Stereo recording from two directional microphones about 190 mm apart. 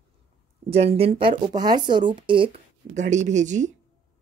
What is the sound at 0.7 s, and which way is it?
Speech, 35° right (ahead or behind).